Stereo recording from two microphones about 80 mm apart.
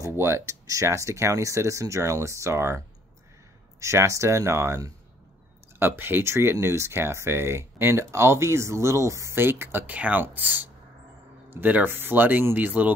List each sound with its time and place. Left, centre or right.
0.1 s speech: right
3.8 s speech: right
5.8 s speech: right